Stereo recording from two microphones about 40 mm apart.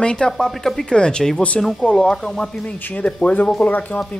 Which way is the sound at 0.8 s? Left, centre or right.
Left.